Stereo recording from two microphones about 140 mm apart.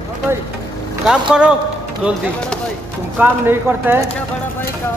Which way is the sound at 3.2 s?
15° right (ahead or behind).